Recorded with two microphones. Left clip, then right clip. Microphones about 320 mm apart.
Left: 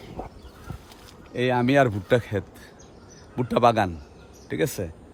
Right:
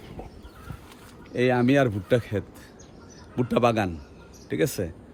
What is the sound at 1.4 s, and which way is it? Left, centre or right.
Speech, centre.